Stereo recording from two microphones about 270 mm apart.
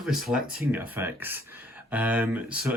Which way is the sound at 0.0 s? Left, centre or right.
Centre.